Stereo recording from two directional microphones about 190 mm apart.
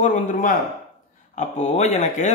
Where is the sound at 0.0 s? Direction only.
40° left (ahead or behind).